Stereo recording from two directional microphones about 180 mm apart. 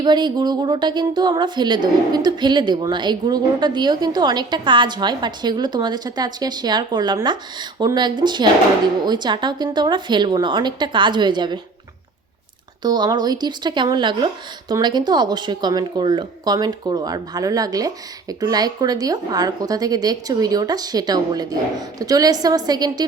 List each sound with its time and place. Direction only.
0.0 s speech: 25° right (ahead or behind)
12.8 s speech: 25° right (ahead or behind)